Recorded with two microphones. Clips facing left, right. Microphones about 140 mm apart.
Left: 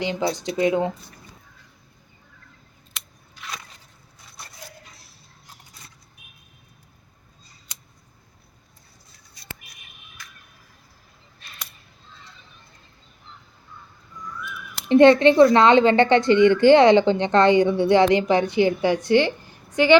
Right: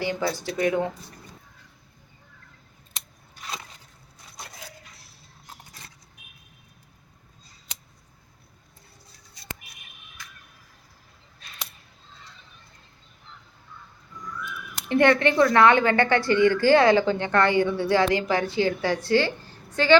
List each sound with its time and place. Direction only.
0.0 s speech: 20° left (ahead or behind)
2.9 s scissors: 35° right (ahead or behind)
14.8 s speech: 20° left (ahead or behind)